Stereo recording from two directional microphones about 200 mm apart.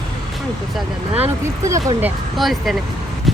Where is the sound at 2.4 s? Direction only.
Centre (ahead or behind).